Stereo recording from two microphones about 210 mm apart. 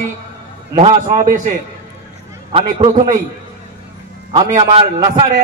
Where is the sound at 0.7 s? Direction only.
30° right (ahead or behind).